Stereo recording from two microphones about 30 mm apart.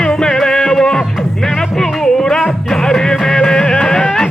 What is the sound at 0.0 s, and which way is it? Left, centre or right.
Music, left.